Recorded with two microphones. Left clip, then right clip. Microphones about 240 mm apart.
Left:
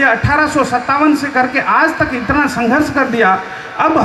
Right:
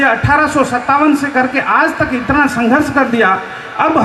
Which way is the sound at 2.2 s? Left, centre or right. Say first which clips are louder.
Right 3 dB; right.